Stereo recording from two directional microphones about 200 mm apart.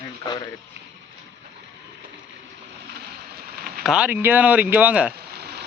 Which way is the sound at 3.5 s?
50° right (ahead or behind).